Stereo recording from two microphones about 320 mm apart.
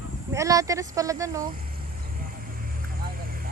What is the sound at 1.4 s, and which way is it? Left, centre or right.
Vehicle, right.